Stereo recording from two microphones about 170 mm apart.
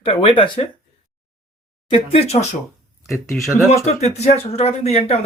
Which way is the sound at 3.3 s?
5° left (ahead or behind).